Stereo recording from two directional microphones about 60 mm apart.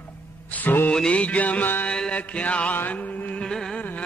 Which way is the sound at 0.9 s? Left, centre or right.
Centre.